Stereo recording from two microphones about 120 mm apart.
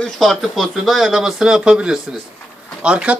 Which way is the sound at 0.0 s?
Centre (ahead or behind).